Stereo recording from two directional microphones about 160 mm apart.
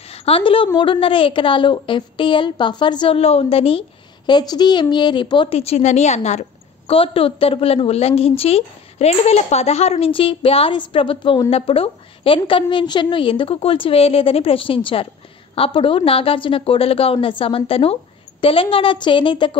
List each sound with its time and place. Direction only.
0.1 s a woman's voice: 40° left (ahead or behind)
4.3 s a woman's voice: 25° left (ahead or behind); by 6.4 s 45° left (ahead or behind)
6.9 s a woman's voice: 35° left (ahead or behind)